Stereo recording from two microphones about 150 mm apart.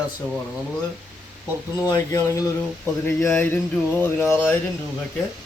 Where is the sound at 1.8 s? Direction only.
20° left (ahead or behind).